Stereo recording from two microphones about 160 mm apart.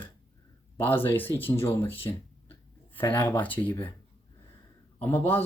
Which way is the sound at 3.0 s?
30° left (ahead or behind).